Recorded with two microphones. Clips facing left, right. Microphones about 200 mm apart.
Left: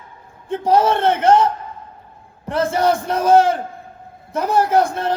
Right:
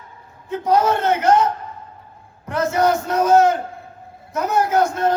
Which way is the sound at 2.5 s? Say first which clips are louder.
Left 1 dB; 30° left (ahead or behind).